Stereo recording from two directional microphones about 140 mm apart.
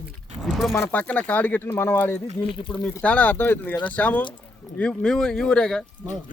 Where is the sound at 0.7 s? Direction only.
10° left (ahead or behind).